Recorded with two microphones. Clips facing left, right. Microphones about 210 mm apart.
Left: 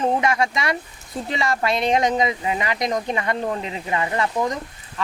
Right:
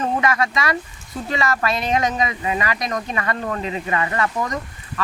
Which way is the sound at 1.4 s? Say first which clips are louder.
Left 1 dB; 15° left (ahead or behind).